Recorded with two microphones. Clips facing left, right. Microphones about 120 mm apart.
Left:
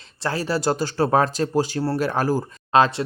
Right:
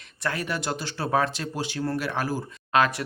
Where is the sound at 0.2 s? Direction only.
30° left (ahead or behind).